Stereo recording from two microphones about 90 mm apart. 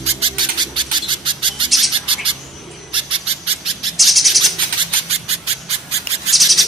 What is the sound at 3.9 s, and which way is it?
Bird, centre (ahead or behind).